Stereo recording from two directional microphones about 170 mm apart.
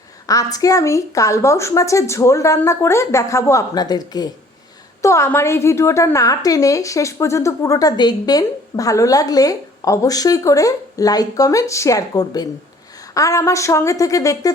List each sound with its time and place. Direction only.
0.3 s a woman's voice: 20° left (ahead or behind)